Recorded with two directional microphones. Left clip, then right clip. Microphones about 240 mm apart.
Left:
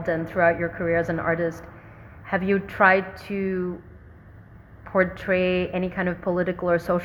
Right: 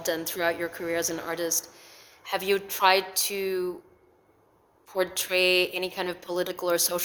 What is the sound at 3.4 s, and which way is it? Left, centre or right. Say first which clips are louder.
Speech: left 4 dB; right.